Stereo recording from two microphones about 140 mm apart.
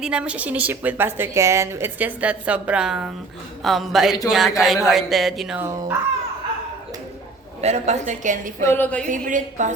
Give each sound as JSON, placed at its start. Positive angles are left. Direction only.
{"t": 0.0, "sound": "a woman's voice", "side_deg": -5}
{"t": 5.5, "sound": "a woman's voice", "side_deg": -15}
{"t": 7.6, "sound": "a woman's voice", "side_deg": -50}
{"t": 8.6, "sound": "a woman's voice", "side_deg": 15}
{"t": 9.0, "sound": "a woman's voice", "side_deg": -70}